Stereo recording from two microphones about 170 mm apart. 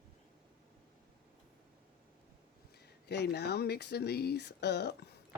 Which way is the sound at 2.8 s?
75° left (ahead or behind).